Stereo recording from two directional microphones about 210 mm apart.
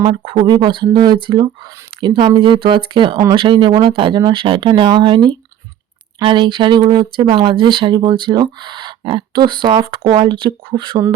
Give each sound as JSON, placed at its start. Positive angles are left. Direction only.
{"t": 0.0, "sound": "speech", "side_deg": -25}